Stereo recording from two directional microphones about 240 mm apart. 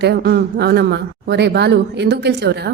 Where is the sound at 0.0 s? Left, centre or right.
Right.